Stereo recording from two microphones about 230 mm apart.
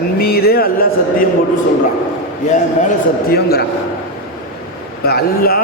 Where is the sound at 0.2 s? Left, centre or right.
Left.